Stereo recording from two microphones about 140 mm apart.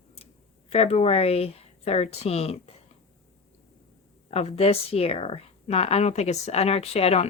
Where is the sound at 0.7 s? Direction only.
50° left (ahead or behind).